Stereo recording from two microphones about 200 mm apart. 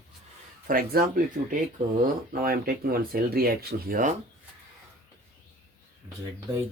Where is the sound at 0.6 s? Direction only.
45° right (ahead or behind).